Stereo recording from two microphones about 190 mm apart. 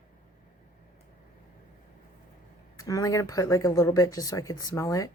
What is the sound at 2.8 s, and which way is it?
Speech, 15° left (ahead or behind).